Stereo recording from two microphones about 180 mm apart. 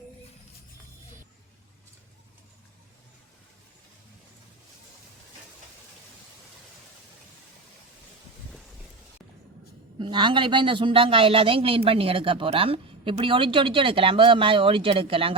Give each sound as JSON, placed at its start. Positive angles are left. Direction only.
{"t": 10.0, "sound": "speech", "side_deg": -25}